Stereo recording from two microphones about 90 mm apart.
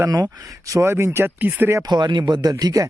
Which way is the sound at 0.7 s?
30° right (ahead or behind).